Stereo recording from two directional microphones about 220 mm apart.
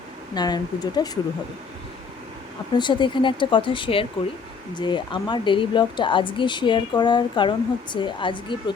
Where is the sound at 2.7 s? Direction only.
20° left (ahead or behind).